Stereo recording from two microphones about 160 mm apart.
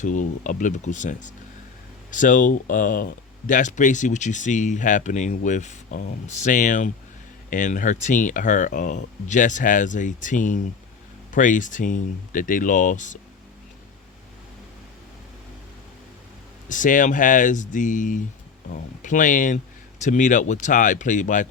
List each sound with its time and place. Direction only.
0.0 s speech: 50° left (ahead or behind)
16.6 s speech: 55° left (ahead or behind)